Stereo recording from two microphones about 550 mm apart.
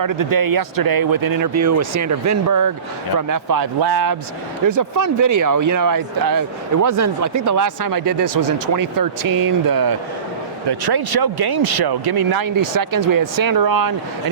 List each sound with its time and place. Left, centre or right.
0.0 s speech: right
8.3 s speech: right
8.7 s speech: right